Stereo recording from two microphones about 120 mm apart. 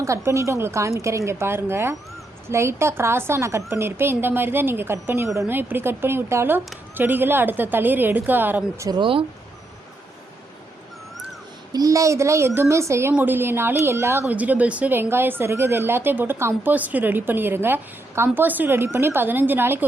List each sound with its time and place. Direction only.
0.0 s a woman's voice: 25° right (ahead or behind)
8.9 s speech: 45° right (ahead or behind)
11.7 s a woman's voice: 30° right (ahead or behind)